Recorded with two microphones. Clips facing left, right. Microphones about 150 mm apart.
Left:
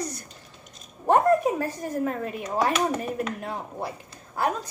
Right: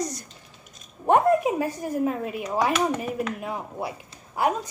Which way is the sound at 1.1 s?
10° right (ahead or behind).